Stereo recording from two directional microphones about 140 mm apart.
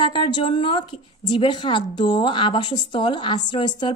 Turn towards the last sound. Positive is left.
turn(degrees=30)  # may be behind; listen again after turning